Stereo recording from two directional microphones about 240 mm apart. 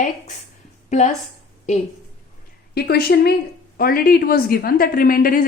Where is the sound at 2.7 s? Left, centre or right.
Left.